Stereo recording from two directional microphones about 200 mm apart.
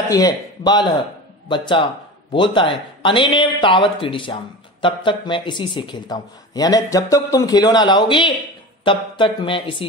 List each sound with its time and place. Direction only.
0.1 s speech: 20° left (ahead or behind)